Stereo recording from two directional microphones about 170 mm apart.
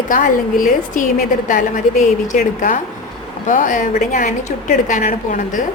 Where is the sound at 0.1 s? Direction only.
50° left (ahead or behind).